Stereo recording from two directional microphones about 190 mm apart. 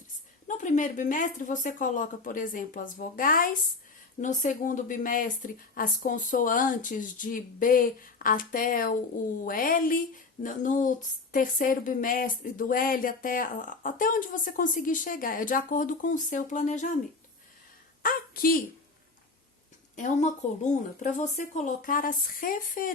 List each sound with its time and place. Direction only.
0.4 s a woman's voice: 40° left (ahead or behind)
18.0 s a woman's voice: 50° left (ahead or behind)
20.0 s a woman's voice: 40° left (ahead or behind)